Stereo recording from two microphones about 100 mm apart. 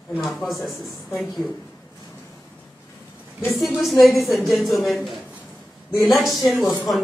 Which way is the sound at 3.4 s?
Centre (ahead or behind).